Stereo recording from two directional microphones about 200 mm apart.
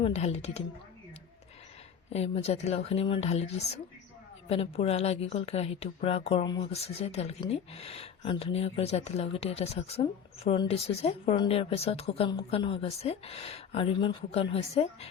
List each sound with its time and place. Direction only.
0.0 s a woman's voice: 30° left (ahead or behind)
2.0 s a woman's voice: 30° left (ahead or behind)